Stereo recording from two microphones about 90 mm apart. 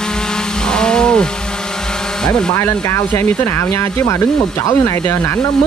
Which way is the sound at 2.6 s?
25° left (ahead or behind).